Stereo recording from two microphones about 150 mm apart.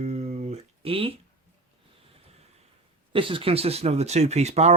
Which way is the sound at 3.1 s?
35° right (ahead or behind).